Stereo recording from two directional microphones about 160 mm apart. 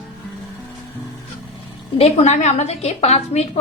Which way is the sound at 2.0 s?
40° left (ahead or behind).